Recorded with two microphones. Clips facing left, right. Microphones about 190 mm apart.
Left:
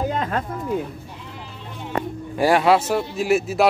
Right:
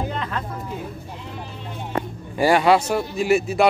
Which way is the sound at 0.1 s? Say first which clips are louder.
Left 4 dB; 45° left (ahead or behind).